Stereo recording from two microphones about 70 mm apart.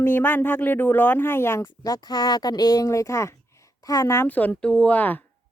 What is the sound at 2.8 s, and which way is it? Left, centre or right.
Speech, left.